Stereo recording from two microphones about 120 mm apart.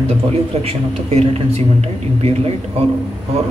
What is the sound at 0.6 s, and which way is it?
Speech, 60° right (ahead or behind).